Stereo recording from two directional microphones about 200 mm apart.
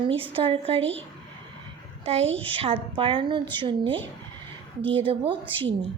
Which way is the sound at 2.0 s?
30° right (ahead or behind).